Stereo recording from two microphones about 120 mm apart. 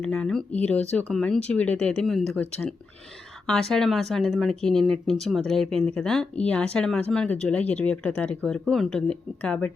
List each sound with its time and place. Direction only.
0.0 s speech: 5° left (ahead or behind)